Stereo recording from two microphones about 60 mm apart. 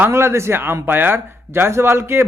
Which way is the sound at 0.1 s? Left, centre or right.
Right.